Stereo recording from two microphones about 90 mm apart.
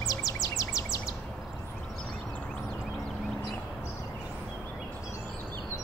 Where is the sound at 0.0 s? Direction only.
40° left (ahead or behind).